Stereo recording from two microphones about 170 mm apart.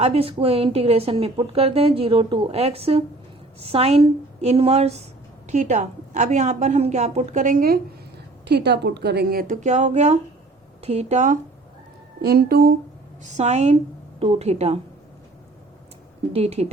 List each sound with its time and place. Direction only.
0.0 s a woman's voice: 35° right (ahead or behind); by 7.8 s 55° right (ahead or behind)
8.4 s a woman's voice: 75° right (ahead or behind); by 11.3 s 45° right (ahead or behind)
12.2 s a woman's voice: 65° right (ahead or behind)
13.2 s a woman's voice: 40° right (ahead or behind)
16.3 s a woman's voice: 40° right (ahead or behind)